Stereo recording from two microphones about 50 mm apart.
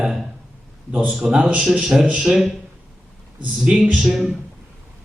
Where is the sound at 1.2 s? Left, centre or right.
Centre.